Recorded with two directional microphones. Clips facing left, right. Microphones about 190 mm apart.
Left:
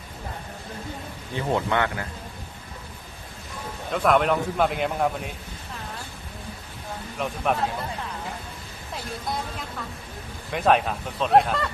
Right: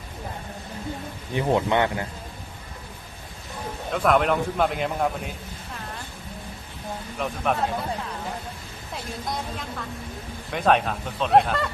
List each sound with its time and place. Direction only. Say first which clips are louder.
1.3 s a man's voice: right 3 dB; 20° right (ahead or behind)
3.9 s a man's voice: even; centre (ahead or behind)
7.2 s a man's voice: even; centre (ahead or behind)
10.5 s a man's voice: even; centre (ahead or behind)